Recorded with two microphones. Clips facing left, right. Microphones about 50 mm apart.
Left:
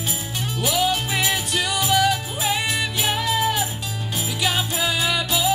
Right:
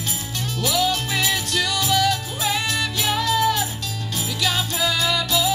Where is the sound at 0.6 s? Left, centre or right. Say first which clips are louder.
Even; centre.